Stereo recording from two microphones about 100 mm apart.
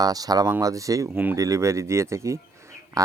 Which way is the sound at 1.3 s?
35° right (ahead or behind).